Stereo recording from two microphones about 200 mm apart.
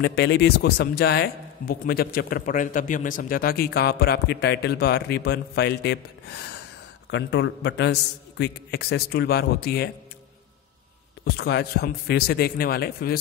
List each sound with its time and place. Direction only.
0.0 s speech: 60° left (ahead or behind)
7.1 s a man's voice: 65° left (ahead or behind)
11.3 s speech: 50° left (ahead or behind)